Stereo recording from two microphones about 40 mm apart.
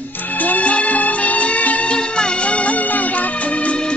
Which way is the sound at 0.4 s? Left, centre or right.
Left.